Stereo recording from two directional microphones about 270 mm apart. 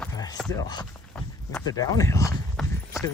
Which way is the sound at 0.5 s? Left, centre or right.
Centre.